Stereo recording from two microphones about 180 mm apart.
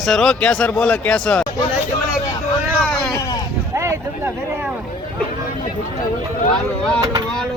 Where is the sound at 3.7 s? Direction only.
15° right (ahead or behind).